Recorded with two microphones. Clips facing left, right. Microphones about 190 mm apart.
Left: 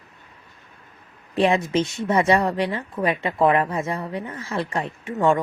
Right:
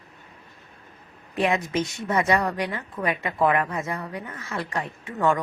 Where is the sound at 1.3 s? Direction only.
30° left (ahead or behind).